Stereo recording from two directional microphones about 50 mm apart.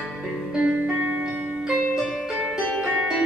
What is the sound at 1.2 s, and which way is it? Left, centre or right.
Music, centre.